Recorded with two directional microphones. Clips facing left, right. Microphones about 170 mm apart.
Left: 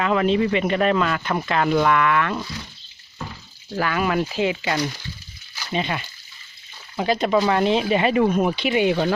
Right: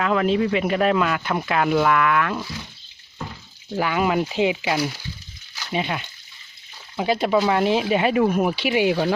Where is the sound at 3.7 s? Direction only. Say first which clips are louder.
Right 1 dB; 15° right (ahead or behind).